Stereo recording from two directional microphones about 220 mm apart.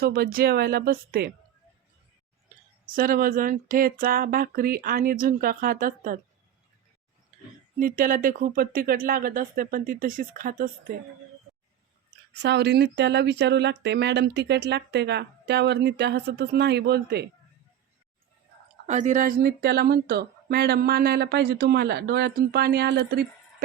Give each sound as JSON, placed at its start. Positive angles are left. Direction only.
{"t": 0.0, "sound": "speech", "side_deg": -45}
{"t": 2.9, "sound": "speech", "side_deg": -40}
{"t": 7.8, "sound": "speech", "side_deg": -40}
{"t": 12.3, "sound": "speech", "side_deg": -50}
{"t": 18.9, "sound": "speech", "side_deg": -35}